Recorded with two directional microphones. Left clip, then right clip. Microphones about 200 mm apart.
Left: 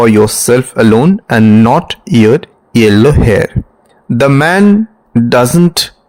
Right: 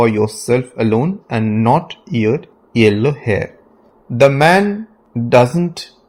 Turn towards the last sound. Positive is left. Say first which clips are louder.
# left 3 dB
turn(degrees=45)  # may be behind; listen again after turning